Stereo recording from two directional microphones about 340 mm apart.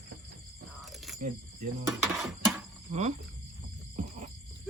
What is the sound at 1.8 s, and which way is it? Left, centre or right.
Speech, centre.